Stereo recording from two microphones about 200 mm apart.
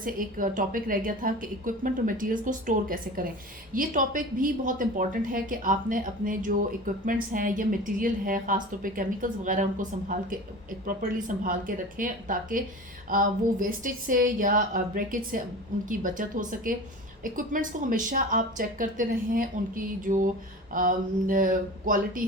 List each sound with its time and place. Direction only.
0.0 s speech: 45° right (ahead or behind)